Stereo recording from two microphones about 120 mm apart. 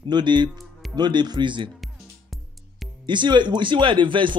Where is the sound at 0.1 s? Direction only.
40° right (ahead or behind).